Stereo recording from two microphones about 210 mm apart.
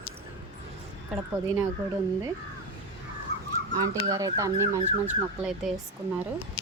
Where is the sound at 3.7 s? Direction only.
20° right (ahead or behind).